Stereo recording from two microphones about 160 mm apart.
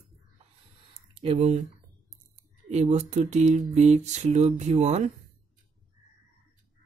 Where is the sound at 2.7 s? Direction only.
45° right (ahead or behind).